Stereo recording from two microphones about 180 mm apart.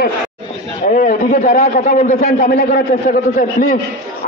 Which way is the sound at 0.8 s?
50° left (ahead or behind).